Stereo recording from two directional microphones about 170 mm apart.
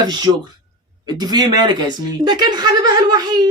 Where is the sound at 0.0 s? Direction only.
25° right (ahead or behind).